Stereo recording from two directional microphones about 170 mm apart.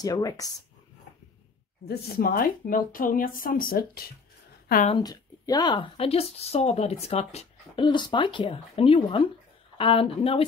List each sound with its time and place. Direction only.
0.0 s speech: 20° left (ahead or behind)
1.9 s speech: 60° left (ahead or behind)
5.0 s speech: 25° left (ahead or behind)